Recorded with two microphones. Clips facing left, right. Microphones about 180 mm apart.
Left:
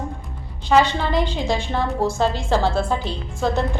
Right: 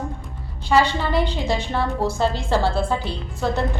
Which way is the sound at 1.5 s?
15° left (ahead or behind).